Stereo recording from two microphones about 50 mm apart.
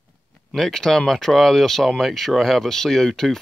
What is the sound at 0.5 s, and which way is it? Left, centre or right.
Speech, centre.